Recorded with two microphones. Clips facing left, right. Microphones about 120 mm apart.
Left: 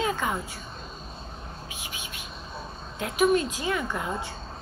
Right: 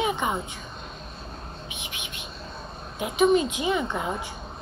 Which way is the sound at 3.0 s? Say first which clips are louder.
Right 2 dB; 15° right (ahead or behind).